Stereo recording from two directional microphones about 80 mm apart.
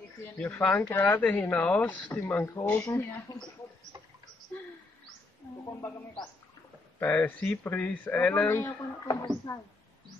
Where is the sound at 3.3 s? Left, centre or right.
Left.